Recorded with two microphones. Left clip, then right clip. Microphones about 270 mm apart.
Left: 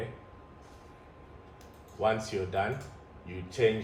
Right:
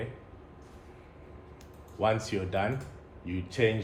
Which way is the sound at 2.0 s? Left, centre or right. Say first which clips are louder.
Right 1 dB; right.